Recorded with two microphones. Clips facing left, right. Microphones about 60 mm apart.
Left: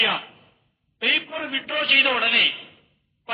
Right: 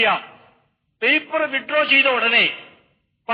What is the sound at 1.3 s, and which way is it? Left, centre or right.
Speech, right.